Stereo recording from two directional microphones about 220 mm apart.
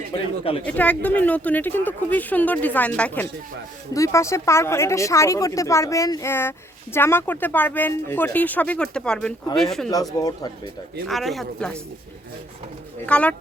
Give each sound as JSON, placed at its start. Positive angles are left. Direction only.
{"t": 0.6, "sound": "speech", "side_deg": 5}
{"t": 9.9, "sound": "speech", "side_deg": 15}
{"t": 11.1, "sound": "speech", "side_deg": 0}
{"t": 13.1, "sound": "speech", "side_deg": 5}